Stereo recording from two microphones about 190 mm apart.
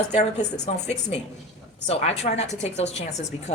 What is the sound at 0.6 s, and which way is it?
A woman's voice, 35° left (ahead or behind).